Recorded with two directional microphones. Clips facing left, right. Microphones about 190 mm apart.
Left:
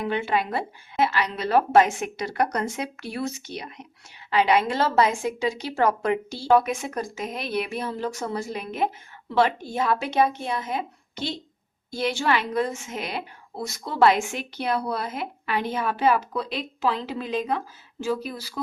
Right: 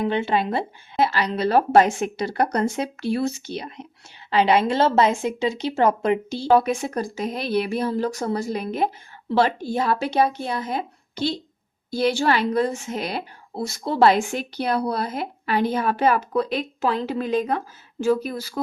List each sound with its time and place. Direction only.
0.0 s a woman's voice: 25° right (ahead or behind)
6.5 s a woman's voice: 30° right (ahead or behind); by 18.6 s 45° right (ahead or behind)